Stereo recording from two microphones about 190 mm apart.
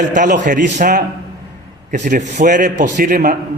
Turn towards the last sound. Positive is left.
turn(degrees=-45)  # may be behind; listen again after turning